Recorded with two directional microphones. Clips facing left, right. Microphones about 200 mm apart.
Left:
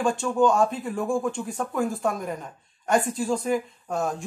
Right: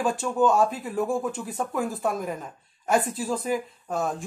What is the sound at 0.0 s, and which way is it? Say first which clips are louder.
Speech: left 1 dB; 5° right (ahead or behind).